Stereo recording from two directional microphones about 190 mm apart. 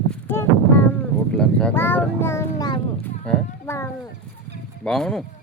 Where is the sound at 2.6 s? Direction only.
20° left (ahead or behind).